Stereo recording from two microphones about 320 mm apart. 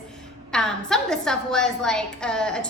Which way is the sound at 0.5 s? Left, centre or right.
Centre.